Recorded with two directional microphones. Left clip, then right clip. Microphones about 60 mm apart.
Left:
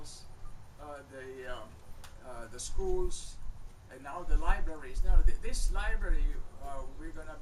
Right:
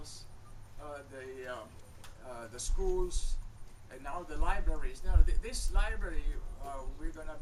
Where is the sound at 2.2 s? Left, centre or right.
Centre.